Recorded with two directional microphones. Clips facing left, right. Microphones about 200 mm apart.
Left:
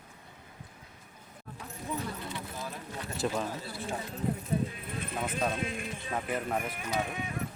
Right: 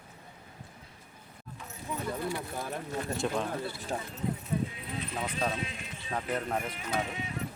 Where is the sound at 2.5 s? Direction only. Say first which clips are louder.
Right 5 dB; 55° right (ahead or behind).